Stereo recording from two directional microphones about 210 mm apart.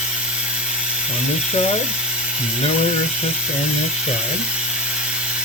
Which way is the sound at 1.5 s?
30° left (ahead or behind).